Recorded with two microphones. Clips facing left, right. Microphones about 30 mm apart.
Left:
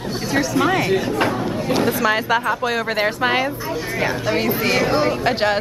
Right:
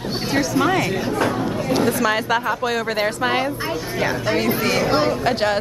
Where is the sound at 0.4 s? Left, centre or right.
Centre.